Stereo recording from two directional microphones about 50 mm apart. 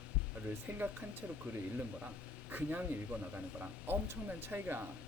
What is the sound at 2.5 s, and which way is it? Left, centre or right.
Speech, right.